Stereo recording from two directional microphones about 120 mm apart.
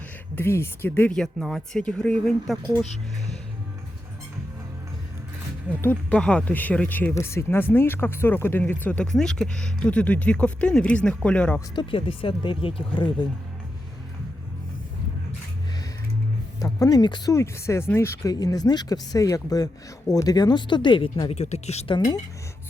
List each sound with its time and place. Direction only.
0.3 s speech: 20° left (ahead or behind)
5.8 s speech: 15° left (ahead or behind)
11.7 s speech: 45° left (ahead or behind)
16.6 s speech: 30° left (ahead or behind)
17.3 s speech: 25° left (ahead or behind)
18.2 s speech: 30° left (ahead or behind); by 21.3 s 45° left (ahead or behind)
21.3 s speech: 65° left (ahead or behind)